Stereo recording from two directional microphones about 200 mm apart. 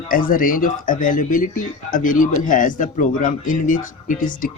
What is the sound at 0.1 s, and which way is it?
Speech, 45° left (ahead or behind).